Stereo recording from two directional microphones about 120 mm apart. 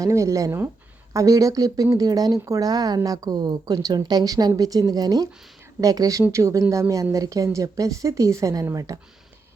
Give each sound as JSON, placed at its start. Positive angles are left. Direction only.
{"t": 0.0, "sound": "a woman's voice", "side_deg": -25}